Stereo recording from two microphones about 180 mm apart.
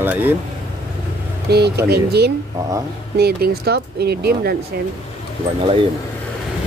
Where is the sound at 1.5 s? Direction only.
65° right (ahead or behind).